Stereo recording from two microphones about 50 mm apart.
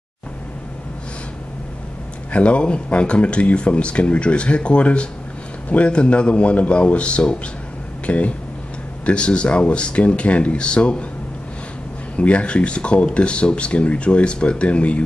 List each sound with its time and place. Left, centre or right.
2.3 s speech: left
12.2 s speech: left